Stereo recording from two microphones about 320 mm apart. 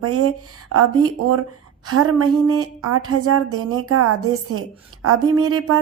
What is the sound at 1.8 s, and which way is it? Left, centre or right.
A woman's voice, right.